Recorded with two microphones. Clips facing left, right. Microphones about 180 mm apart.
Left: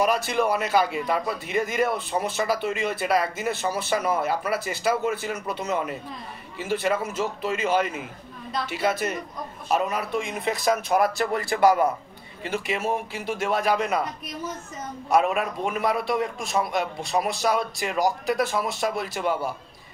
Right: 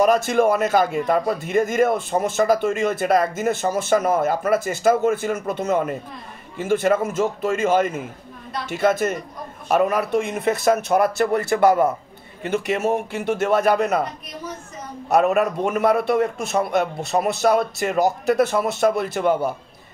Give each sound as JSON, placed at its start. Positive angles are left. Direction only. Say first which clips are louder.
{"t": 0.0, "sound": "a man's voice", "louder": "right 6 dB", "side_deg": -45}
{"t": 15.2, "sound": "a man's voice", "louder": "right 6 dB", "side_deg": -45}